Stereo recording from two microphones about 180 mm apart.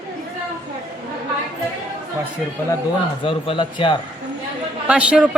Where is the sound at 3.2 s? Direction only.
30° left (ahead or behind).